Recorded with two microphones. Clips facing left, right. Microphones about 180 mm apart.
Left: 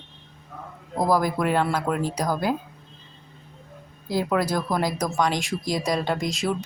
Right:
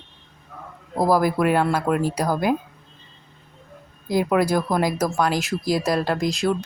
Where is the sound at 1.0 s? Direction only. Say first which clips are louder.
Right 3 dB; 10° right (ahead or behind).